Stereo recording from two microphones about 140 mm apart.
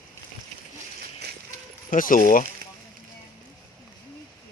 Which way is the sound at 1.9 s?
80° left.